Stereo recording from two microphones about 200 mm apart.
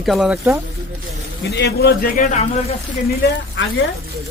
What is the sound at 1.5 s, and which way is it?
Speech, 55° left (ahead or behind).